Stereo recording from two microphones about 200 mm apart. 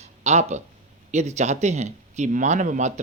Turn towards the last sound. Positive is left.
turn(degrees=-35)  # may be behind; listen again after turning